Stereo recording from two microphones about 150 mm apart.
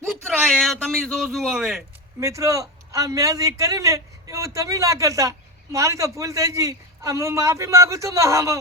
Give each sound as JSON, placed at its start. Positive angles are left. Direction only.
{"t": 0.0, "sound": "a man's voice", "side_deg": 5}
{"t": 2.2, "sound": "a man's voice", "side_deg": -20}